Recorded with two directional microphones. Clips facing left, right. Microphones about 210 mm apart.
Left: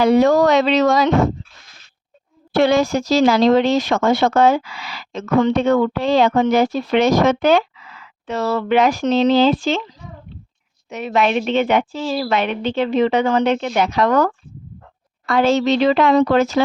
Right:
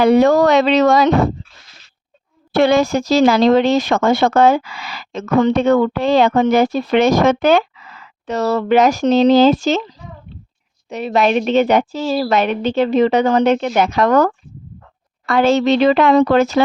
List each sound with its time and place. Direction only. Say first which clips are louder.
0.0 s speech: right 2 dB; 60° right (ahead or behind)
2.6 s a woman's voice: right 2 dB; 55° right (ahead or behind)
15.3 s speech: right 2 dB; 60° right (ahead or behind)